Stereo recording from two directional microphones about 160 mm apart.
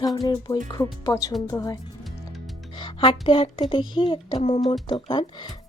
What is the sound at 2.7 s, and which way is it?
Speech, 30° left (ahead or behind).